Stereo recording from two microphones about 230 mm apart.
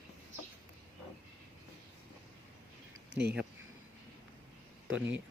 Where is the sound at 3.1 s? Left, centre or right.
Right.